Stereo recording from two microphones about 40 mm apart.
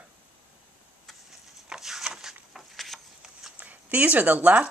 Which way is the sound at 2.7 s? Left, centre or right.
Centre.